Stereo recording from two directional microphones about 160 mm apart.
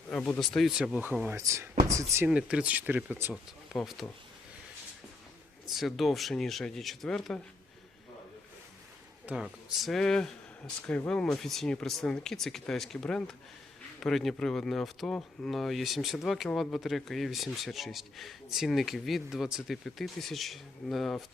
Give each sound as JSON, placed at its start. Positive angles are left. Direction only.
{"t": 0.1, "sound": "speech", "side_deg": 5}
{"t": 3.7, "sound": "speech", "side_deg": 0}
{"t": 5.6, "sound": "speech", "side_deg": 0}
{"t": 9.2, "sound": "speech", "side_deg": -5}